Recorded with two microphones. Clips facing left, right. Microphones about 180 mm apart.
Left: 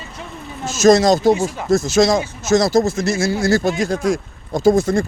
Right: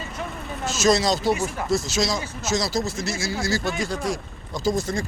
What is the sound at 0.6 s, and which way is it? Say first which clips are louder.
Speech: left 8 dB; 45° left (ahead or behind).